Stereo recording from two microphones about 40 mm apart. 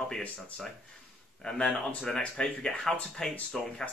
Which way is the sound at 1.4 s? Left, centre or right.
Centre.